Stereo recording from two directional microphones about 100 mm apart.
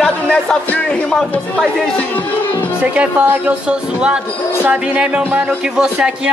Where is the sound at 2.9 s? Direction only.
10° right (ahead or behind).